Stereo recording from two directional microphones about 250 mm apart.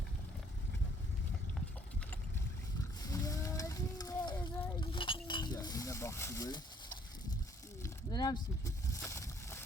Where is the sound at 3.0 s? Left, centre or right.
Centre.